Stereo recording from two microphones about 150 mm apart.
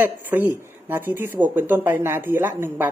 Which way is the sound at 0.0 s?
10° right (ahead or behind).